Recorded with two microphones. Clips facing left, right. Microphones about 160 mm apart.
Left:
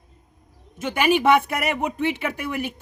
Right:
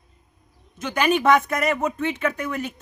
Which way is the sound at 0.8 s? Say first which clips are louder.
Left 1 dB; 10° left (ahead or behind).